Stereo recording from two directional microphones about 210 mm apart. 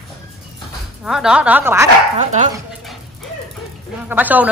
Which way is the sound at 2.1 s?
35° right (ahead or behind).